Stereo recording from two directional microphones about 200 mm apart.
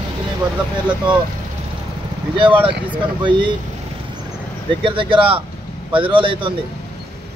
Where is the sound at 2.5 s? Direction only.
10° right (ahead or behind).